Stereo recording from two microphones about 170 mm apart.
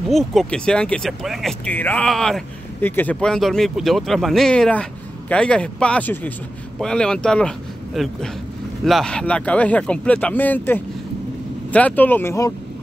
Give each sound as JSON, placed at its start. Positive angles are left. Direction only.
{"t": 0.1, "sound": "speech", "side_deg": 0}